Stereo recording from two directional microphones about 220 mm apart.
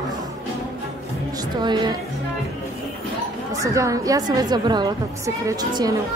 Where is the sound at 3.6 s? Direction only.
15° right (ahead or behind).